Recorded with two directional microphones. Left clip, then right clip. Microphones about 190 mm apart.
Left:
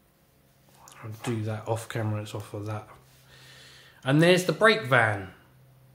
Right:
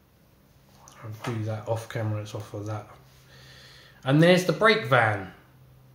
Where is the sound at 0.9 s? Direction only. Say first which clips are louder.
Left 1 dB; 30° left (ahead or behind).